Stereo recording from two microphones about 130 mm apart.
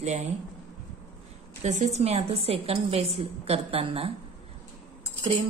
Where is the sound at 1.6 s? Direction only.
65° right (ahead or behind); by 4.1 s 50° right (ahead or behind).